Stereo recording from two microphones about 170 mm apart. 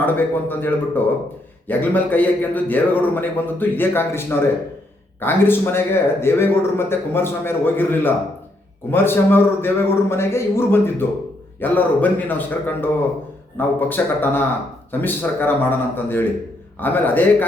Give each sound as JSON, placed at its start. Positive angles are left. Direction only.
{"t": 0.0, "sound": "a man's voice", "side_deg": 10}